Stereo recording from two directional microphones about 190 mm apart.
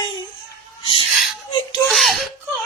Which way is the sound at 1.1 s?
Centre (ahead or behind).